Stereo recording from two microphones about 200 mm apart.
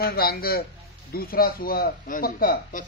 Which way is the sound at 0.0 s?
50° left (ahead or behind).